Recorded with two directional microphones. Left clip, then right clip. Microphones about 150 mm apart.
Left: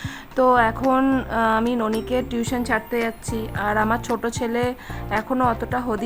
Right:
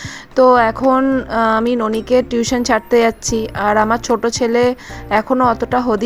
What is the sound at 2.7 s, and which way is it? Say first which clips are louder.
A woman's voice: right 12 dB; 35° right (ahead or behind).